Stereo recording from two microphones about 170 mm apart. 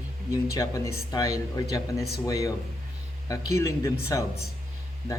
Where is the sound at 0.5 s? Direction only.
20° left (ahead or behind).